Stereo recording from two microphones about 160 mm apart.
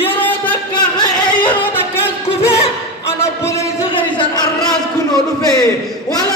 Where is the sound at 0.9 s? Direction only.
30° left (ahead or behind).